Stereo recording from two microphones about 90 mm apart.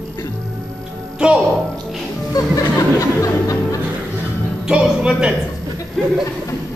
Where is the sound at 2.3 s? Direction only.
40° left (ahead or behind).